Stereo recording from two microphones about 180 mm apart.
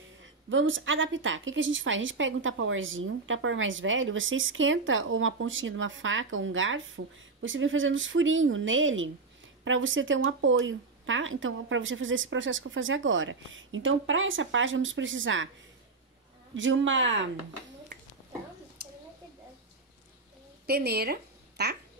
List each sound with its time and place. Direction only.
0.2 s a woman's voice: 90° right
16.5 s a woman's voice: 90° right
20.6 s a woman's voice: 60° right (ahead or behind)